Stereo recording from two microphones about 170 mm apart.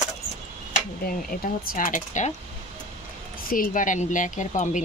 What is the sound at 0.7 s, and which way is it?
Speech, 55° left (ahead or behind).